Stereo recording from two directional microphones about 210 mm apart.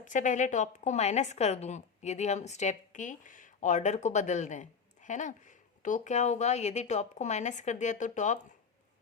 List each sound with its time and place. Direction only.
0.0 s a woman's voice: 35° left (ahead or behind)